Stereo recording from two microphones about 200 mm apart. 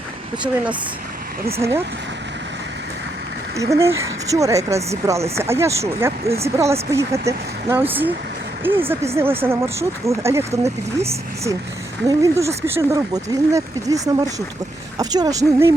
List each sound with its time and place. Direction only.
1.5 s speech: 15° right (ahead or behind)
3.6 s speech: 15° right (ahead or behind)